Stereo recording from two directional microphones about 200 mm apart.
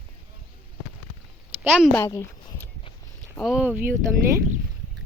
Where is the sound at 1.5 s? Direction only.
10° right (ahead or behind).